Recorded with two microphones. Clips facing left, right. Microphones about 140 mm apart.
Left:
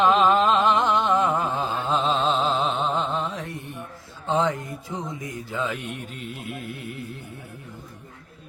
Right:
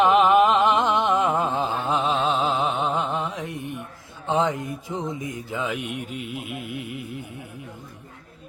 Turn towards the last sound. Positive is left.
turn(degrees=-15)  # may be behind; listen again after turning